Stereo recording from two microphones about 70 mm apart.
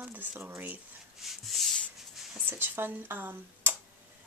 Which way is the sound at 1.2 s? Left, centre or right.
Centre.